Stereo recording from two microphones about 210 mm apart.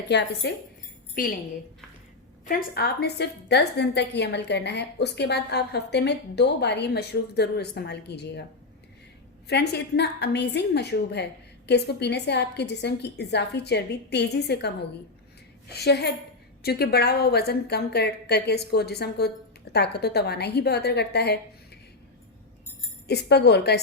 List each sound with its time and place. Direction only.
0.1 s a woman's voice: 50° left (ahead or behind)
1.1 s a woman's voice: 40° left (ahead or behind)
2.5 s a woman's voice: 45° left (ahead or behind)
9.5 s a woman's voice: 50° left (ahead or behind)
15.7 s a woman's voice: 50° left (ahead or behind)
23.0 s a woman's voice: 50° left (ahead or behind)